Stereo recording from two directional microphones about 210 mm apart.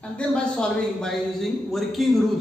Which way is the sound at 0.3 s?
5° left (ahead or behind).